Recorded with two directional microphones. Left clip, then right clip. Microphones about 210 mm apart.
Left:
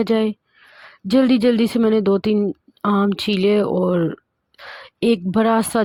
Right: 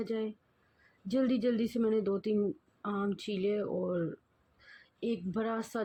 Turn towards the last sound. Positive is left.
turn(degrees=50)  # may be behind; listen again after turning